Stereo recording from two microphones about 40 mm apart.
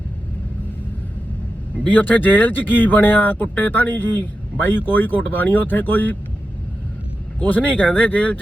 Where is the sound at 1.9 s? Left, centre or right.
Left.